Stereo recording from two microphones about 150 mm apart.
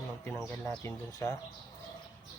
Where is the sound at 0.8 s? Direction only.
25° left (ahead or behind).